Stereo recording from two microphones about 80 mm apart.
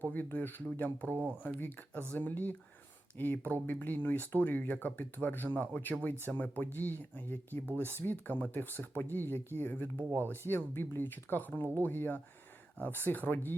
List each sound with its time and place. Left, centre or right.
0.0 s speech: left
1.1 s speech: right
1.5 s speech: left